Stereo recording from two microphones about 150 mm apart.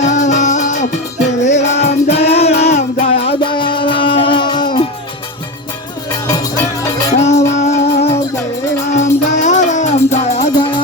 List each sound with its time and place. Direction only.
0.0 s music: 55° left (ahead or behind); by 4.9 s 30° left (ahead or behind)
6.2 s music: 25° left (ahead or behind)
7.1 s music: 50° left (ahead or behind)
10.6 s music: 30° left (ahead or behind)